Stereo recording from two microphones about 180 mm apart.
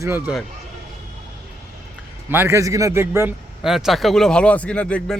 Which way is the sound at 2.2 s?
10° right (ahead or behind).